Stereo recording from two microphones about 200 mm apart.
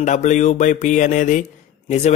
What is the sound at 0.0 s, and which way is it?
Speech, 35° left (ahead or behind).